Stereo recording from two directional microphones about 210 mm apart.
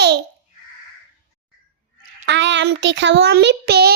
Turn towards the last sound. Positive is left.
turn(degrees=-50)  # may be behind; listen again after turning